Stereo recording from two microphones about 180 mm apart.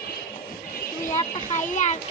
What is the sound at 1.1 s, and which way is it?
Speech, 45° left (ahead or behind).